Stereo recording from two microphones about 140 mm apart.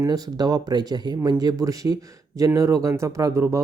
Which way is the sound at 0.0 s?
25° right (ahead or behind).